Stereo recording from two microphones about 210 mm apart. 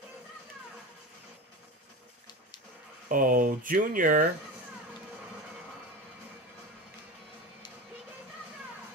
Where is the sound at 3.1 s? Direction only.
40° right (ahead or behind).